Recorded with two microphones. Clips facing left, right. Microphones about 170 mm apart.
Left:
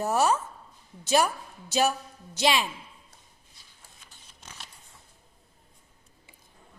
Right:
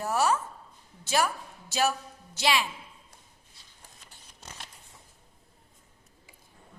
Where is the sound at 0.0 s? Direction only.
20° left (ahead or behind).